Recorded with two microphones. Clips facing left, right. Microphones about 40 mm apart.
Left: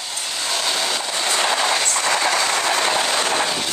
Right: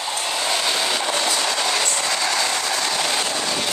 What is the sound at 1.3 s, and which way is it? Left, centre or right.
Train, left.